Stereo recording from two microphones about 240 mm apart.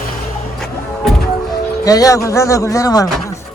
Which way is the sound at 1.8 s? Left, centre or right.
Centre.